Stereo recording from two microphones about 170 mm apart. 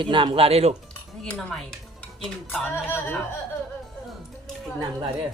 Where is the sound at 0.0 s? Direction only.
30° right (ahead or behind).